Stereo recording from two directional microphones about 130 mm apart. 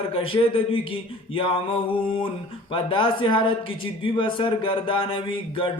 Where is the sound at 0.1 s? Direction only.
45° left (ahead or behind).